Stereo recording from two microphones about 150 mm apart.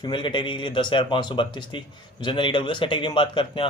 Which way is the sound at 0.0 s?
35° left (ahead or behind).